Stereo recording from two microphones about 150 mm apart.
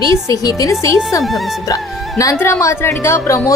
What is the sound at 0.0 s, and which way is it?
A woman's voice, 20° left (ahead or behind).